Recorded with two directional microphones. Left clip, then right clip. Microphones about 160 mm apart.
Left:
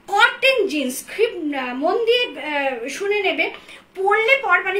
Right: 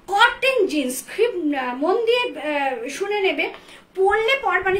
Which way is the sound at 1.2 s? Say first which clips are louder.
Even; 25° right (ahead or behind).